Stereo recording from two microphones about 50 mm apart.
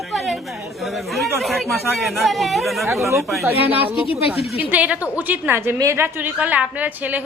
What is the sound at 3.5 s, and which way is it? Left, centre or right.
A woman's voice, right.